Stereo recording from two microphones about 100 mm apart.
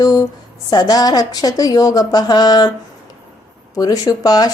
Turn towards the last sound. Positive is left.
turn(degrees=40)  # may be behind; listen again after turning